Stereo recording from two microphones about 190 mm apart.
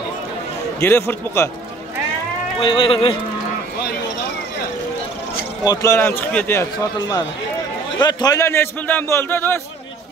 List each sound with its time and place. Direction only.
0.7 s speech: 10° left (ahead or behind)
2.6 s speech: 25° left (ahead or behind)
5.6 s speech: 20° left (ahead or behind)